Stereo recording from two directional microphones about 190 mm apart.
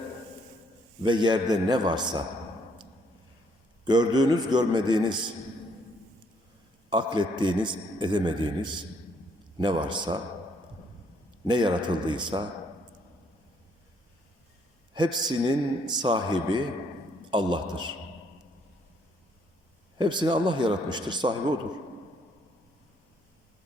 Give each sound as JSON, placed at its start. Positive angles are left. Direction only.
{"t": 1.0, "sound": "a man's voice", "side_deg": -25}
{"t": 3.8, "sound": "a man's voice", "side_deg": -20}
{"t": 6.9, "sound": "a man's voice", "side_deg": -25}
{"t": 11.4, "sound": "a man's voice", "side_deg": -25}
{"t": 14.9, "sound": "a man's voice", "side_deg": -25}
{"t": 20.0, "sound": "a man's voice", "side_deg": -25}